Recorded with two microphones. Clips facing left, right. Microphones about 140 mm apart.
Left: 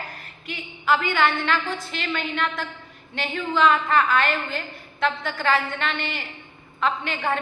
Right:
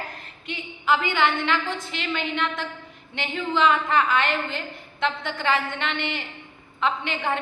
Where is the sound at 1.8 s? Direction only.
15° right (ahead or behind).